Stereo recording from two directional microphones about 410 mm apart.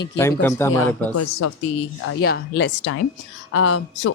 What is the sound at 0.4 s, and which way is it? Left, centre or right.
Speech, centre.